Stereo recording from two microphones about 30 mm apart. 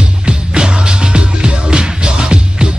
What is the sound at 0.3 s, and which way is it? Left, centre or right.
Music, right.